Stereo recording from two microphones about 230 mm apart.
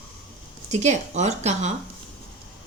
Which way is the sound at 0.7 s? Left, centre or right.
Right.